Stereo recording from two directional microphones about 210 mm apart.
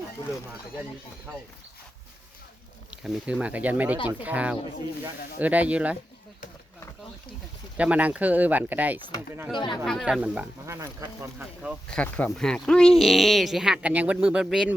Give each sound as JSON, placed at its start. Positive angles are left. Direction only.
{"t": 2.9, "sound": "speech", "side_deg": -5}
{"t": 7.8, "sound": "speech", "side_deg": -5}
{"t": 9.0, "sound": "speech", "side_deg": 20}
{"t": 9.8, "sound": "speech", "side_deg": 0}
{"t": 11.9, "sound": "speech", "side_deg": 5}